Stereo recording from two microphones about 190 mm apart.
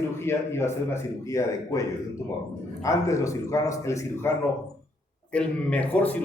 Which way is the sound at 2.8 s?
15° left (ahead or behind).